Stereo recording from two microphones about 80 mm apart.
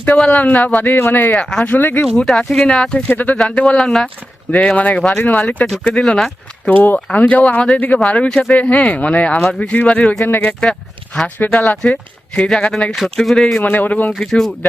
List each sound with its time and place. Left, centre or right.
0.3 s speech: centre
2.1 s speech: centre
3.1 s speech: centre
3.3 s speech: centre
6.7 s speech: left
10.2 s speech: left
10.6 s speech: centre
11.3 s speech: centre
13.7 s speech: left
14.2 s speech: centre